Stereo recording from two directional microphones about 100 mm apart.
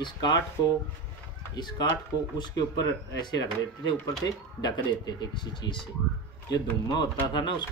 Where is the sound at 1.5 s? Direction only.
45° left (ahead or behind).